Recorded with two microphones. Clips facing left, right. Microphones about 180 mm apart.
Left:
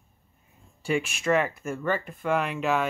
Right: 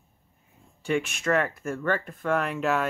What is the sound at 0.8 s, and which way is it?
Speech, 10° left (ahead or behind).